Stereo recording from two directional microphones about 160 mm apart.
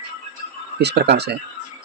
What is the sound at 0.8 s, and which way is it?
Speech, 90° right.